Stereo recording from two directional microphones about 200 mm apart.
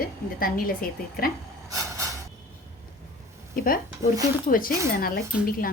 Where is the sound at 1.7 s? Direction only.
15° right (ahead or behind).